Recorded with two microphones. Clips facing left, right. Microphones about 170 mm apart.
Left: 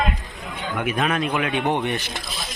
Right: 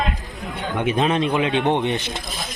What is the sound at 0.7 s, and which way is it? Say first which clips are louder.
Speech: right 3 dB; 25° right (ahead or behind).